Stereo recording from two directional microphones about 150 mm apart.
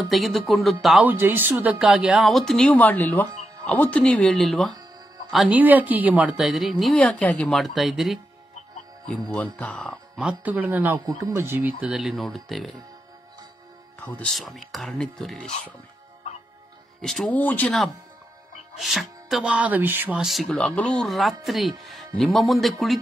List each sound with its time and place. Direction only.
0.1 s a woman's voice: centre (ahead or behind)
1.0 s a woman's voice: 15° right (ahead or behind)
9.3 s speech: 10° left (ahead or behind)
10.2 s speech: 10° right (ahead or behind)
11.1 s speech: 20° right (ahead or behind)
11.8 s a woman's voice: centre (ahead or behind)
13.9 s a woman's voice: 10° left (ahead or behind)
17.0 s a woman's voice: centre (ahead or behind)